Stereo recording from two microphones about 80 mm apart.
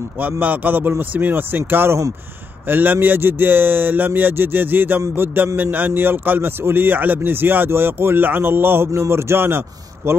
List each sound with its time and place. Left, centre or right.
0.2 s speech: right